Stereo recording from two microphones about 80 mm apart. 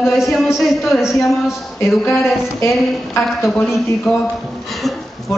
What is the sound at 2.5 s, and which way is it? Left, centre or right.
Speech, left.